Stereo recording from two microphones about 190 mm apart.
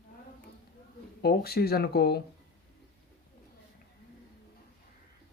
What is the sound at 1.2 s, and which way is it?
Speech, 55° left (ahead or behind).